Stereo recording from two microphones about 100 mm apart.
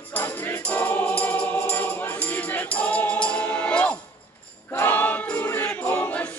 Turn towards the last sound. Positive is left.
turn(degrees=20)  # may be behind; listen again after turning